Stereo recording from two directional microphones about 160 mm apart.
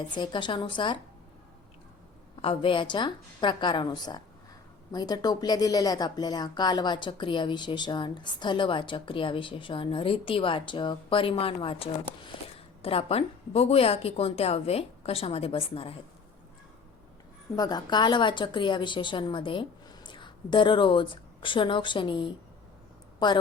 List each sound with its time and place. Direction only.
0.1 s speech: 30° left (ahead or behind)
2.4 s a woman's voice: 35° left (ahead or behind)
17.6 s speech: 25° left (ahead or behind)